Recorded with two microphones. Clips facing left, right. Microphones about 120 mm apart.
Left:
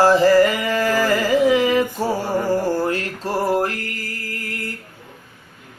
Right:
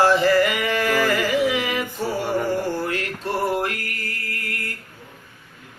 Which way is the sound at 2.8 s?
35° left (ahead or behind).